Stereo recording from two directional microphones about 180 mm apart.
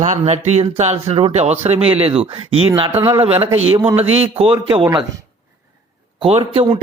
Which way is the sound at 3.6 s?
35° right (ahead or behind).